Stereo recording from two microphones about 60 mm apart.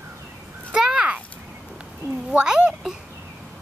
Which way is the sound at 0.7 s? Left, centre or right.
Centre.